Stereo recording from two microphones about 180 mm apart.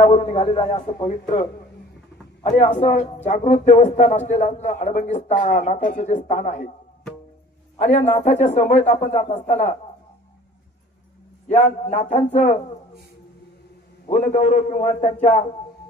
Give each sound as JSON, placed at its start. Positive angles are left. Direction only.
{"t": 0.0, "sound": "speech", "side_deg": 35}
{"t": 0.9, "sound": "speech", "side_deg": 40}
{"t": 7.8, "sound": "speech", "side_deg": 35}
{"t": 11.9, "sound": "speech", "side_deg": 35}
{"t": 14.0, "sound": "speech", "side_deg": 40}